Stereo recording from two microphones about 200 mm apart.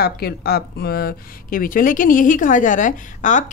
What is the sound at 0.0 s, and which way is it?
Speech, 50° left (ahead or behind).